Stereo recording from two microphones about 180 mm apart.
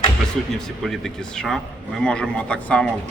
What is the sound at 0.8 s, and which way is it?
Speech, centre (ahead or behind).